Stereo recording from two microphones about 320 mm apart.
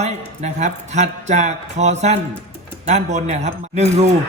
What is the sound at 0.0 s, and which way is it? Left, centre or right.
Speech, right.